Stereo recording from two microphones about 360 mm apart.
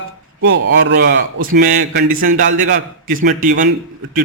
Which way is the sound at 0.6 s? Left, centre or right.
Right.